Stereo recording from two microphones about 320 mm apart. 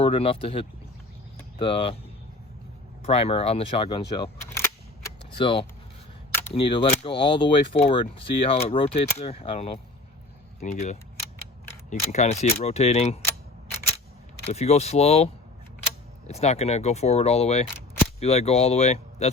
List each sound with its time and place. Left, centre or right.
0.0 s speech: centre
3.0 s speech: centre
4.2 s keys jangling: centre
6.5 s speech: centre
14.4 s speech: centre